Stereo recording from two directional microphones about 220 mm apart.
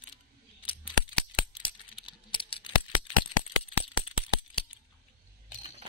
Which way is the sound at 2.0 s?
25° left (ahead or behind).